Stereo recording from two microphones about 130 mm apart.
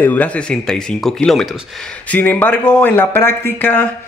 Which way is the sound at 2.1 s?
10° left (ahead or behind).